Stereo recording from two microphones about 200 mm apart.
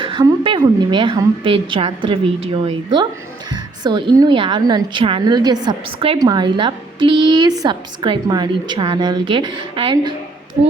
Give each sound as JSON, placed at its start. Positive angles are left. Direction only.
{"t": 0.0, "sound": "a woman's voice", "side_deg": -25}
{"t": 3.5, "sound": "a woman's voice", "side_deg": -20}